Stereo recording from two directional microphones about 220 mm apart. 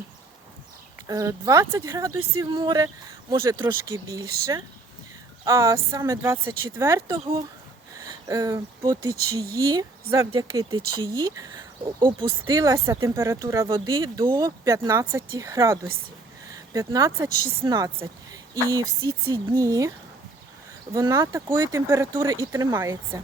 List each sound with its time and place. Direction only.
1.0 s speech: 15° right (ahead or behind)
7.1 s speech: 25° right (ahead or behind)
20.9 s speech: 15° right (ahead or behind)